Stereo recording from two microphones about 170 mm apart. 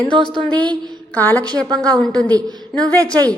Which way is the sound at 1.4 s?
25° right (ahead or behind).